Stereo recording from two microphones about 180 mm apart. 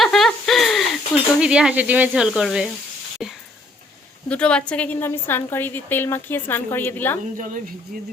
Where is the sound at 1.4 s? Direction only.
5° right (ahead or behind); by 7.2 s 10° left (ahead or behind).